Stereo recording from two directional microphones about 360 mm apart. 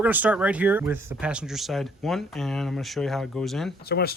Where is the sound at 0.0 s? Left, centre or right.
Centre.